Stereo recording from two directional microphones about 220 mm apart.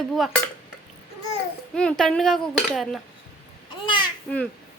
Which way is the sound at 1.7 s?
5° left (ahead or behind).